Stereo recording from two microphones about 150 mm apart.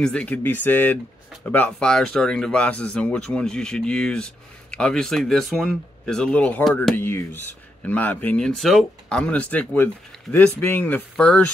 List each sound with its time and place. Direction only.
0.0 s speech: 5° left (ahead or behind)
7.0 s speech: 15° left (ahead or behind)